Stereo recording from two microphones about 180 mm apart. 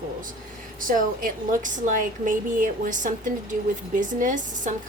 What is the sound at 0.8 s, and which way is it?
A woman's voice, 50° right (ahead or behind).